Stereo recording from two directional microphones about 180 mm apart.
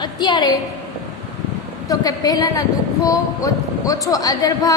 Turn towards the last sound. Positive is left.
turn(degrees=20)  # may be behind; listen again after turning